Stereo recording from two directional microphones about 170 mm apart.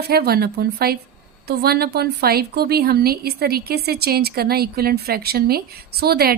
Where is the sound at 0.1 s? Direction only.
65° right (ahead or behind).